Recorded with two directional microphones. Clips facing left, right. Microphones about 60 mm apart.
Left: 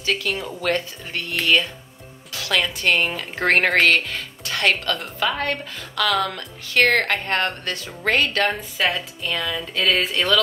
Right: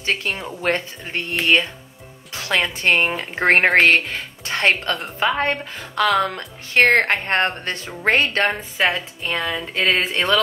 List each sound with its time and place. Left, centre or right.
0.0 s music: right
0.6 s a woman's voice: right
9.3 s music: right